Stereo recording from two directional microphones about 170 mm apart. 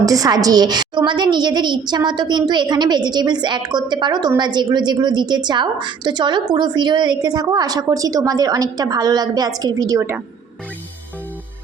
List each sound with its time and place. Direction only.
0.0 s a woman's voice: 20° right (ahead or behind)